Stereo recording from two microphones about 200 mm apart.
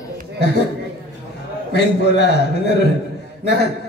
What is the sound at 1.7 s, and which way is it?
A man's voice, 55° left (ahead or behind).